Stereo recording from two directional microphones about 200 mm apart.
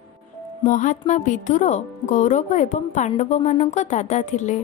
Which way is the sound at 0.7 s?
40° left (ahead or behind).